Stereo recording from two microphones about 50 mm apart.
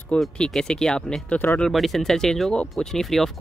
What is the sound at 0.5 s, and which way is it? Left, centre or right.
Speech, centre.